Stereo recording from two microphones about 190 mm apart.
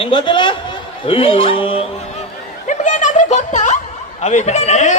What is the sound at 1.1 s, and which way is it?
Speech, 30° left (ahead or behind).